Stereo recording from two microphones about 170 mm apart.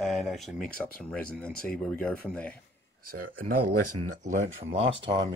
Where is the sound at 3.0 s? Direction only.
60° right (ahead or behind).